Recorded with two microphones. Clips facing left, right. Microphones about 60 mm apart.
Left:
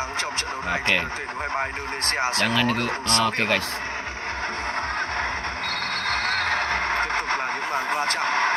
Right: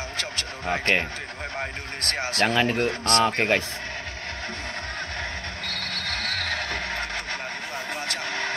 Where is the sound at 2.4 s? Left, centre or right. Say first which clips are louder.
Right 5 dB; right.